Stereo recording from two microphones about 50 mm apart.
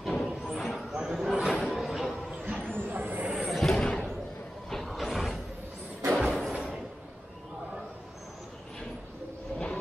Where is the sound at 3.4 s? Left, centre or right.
Centre.